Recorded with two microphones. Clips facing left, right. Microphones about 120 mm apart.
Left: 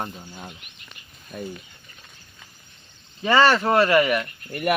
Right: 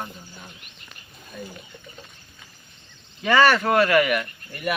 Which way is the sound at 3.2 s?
15° left (ahead or behind).